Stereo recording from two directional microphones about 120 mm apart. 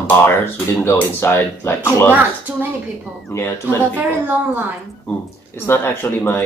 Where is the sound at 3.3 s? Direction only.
20° left (ahead or behind).